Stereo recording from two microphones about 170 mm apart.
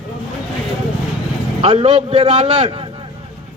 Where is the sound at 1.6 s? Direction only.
35° right (ahead or behind).